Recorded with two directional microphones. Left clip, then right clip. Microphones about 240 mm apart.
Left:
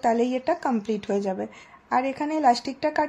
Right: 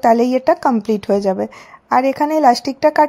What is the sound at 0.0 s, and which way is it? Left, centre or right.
A woman's voice, right.